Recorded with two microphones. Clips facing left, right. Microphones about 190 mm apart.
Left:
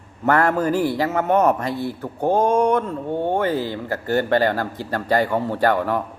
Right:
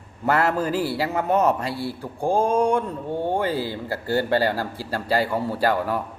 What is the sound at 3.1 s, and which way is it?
Mantra, 15° left (ahead or behind).